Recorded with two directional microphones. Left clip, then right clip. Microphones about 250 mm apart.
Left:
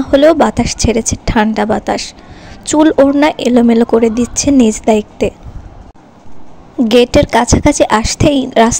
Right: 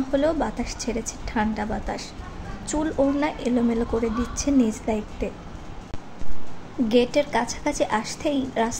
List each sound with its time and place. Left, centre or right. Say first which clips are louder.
0.1 s speech: left 16 dB; left
6.9 s speech: left 12 dB; left